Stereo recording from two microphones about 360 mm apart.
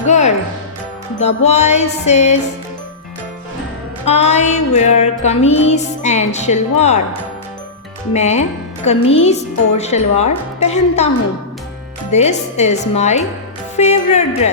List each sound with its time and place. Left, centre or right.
0.0 s music: centre
1.5 s a woman's voice: centre
4.0 s music: centre
8.1 s music: centre
8.9 s a woman's voice: centre
12.1 s music: centre